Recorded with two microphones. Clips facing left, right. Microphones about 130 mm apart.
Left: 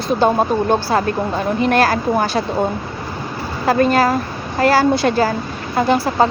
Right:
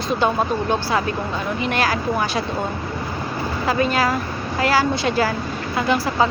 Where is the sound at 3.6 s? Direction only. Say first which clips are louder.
Left 6 dB; 50° left (ahead or behind).